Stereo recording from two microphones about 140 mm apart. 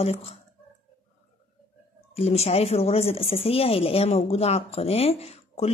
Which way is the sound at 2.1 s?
45° left (ahead or behind).